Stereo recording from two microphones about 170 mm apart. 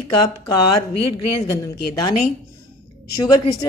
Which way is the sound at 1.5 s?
25° left (ahead or behind).